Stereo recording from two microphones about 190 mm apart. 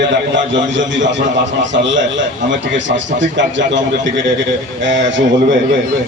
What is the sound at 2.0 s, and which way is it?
A man's voice, 75° right (ahead or behind).